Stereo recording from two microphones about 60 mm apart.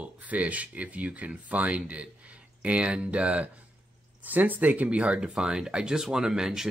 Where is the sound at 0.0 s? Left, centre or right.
Right.